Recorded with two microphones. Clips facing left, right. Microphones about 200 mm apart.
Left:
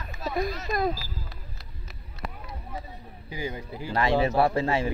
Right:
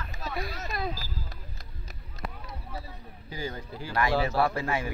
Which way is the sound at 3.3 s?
15° left (ahead or behind).